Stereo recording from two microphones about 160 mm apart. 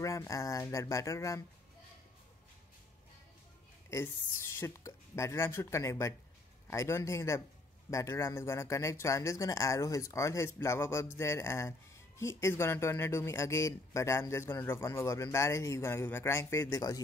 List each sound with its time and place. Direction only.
0.0 s speech: 20° left (ahead or behind)
3.9 s speech: 15° left (ahead or behind)